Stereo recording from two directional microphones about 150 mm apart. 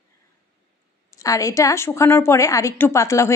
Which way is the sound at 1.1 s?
20° left (ahead or behind).